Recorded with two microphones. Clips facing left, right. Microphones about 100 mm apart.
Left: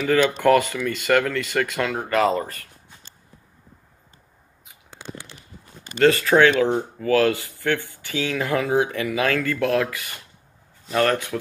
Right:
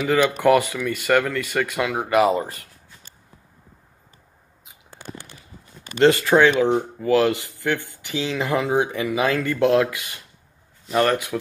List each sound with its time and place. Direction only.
0.4 s speech: 15° right (ahead or behind)
5.9 s speech: 20° right (ahead or behind)